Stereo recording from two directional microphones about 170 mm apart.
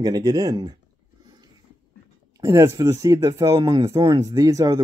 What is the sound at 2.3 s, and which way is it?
Speech, 20° right (ahead or behind).